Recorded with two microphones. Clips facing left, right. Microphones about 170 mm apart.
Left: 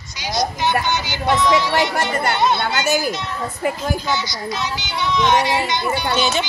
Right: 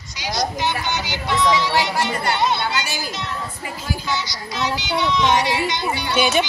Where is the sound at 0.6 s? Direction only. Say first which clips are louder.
Left 3 dB; 50° left (ahead or behind).